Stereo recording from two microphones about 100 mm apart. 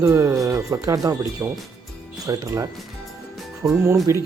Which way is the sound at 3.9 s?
35° right (ahead or behind).